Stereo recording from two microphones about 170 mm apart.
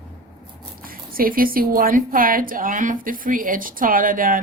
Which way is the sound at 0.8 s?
55° right (ahead or behind).